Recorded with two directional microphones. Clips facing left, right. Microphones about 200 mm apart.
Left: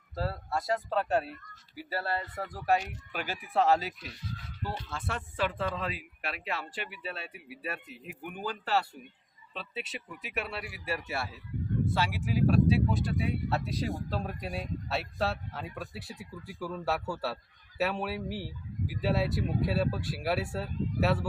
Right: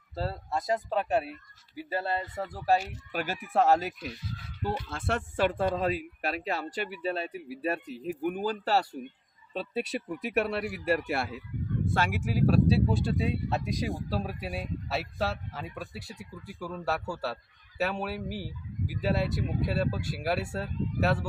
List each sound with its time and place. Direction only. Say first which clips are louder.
0.2 s speech: right 1 dB; 25° right (ahead or behind)
3.1 s speech: right 5 dB; 45° right (ahead or behind)
10.2 s speech: right 8 dB; 55° right (ahead or behind); by 13.6 s 25° right (ahead or behind)
13.7 s speech: right 2 dB; 15° right (ahead or behind)